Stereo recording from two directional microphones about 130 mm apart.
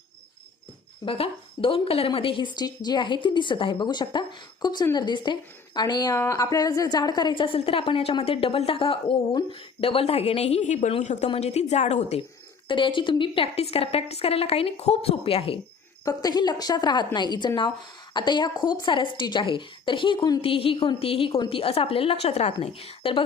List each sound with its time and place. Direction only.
1.0 s a woman's voice: 45° left (ahead or behind)
12.6 s a woman's voice: 40° left (ahead or behind)
16.0 s a woman's voice: 30° left (ahead or behind); by 23.2 s 45° left (ahead or behind)